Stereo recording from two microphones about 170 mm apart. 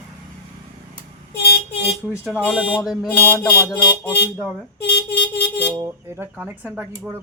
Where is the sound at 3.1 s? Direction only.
10° left (ahead or behind).